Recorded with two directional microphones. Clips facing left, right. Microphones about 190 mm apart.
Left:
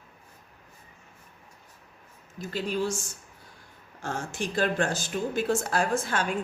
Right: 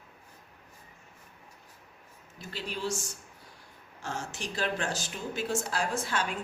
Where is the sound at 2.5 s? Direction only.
50° left (ahead or behind).